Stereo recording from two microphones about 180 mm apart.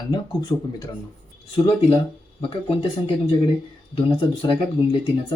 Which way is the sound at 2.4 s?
30° left (ahead or behind).